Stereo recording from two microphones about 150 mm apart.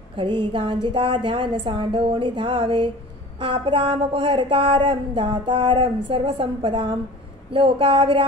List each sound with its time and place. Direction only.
0.1 s speech: 35° right (ahead or behind)